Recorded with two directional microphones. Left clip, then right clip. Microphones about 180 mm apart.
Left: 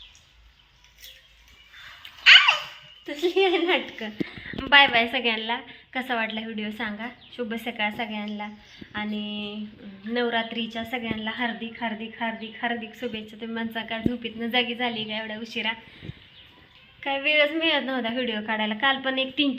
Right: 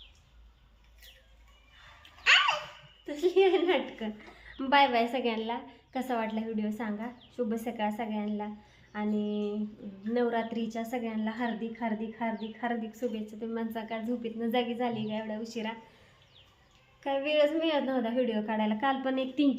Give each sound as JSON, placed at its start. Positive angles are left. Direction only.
{"t": 3.1, "sound": "speech", "side_deg": 20}
{"t": 4.7, "sound": "a woman's voice", "side_deg": -5}
{"t": 17.0, "sound": "a woman's voice", "side_deg": 0}